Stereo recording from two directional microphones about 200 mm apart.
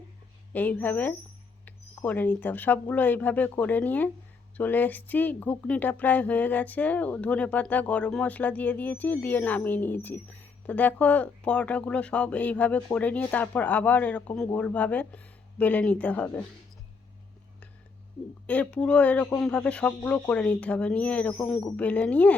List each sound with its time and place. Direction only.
0.5 s speech: 10° left (ahead or behind)
18.4 s speech: 5° left (ahead or behind)